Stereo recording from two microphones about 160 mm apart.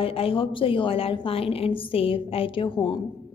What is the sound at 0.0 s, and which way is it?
A woman's voice, 35° left (ahead or behind).